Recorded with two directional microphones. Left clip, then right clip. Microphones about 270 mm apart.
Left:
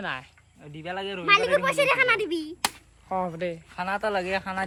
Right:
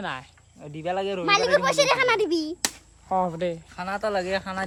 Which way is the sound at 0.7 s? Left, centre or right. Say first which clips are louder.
Right 5 dB; centre.